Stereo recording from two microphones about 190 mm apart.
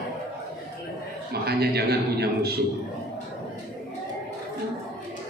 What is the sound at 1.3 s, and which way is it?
Speech, 55° right (ahead or behind).